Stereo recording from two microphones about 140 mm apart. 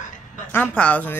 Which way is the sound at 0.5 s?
10° left (ahead or behind).